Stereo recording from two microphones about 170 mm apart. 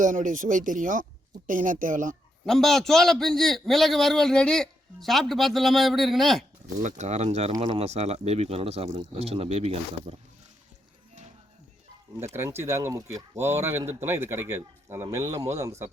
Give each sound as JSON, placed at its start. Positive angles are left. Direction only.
{"t": 0.0, "sound": "speech", "side_deg": -50}
{"t": 2.5, "sound": "a man's voice", "side_deg": 0}
{"t": 6.8, "sound": "speech", "side_deg": -45}
{"t": 7.5, "sound": "speech", "side_deg": -30}
{"t": 12.2, "sound": "a man's voice", "side_deg": -15}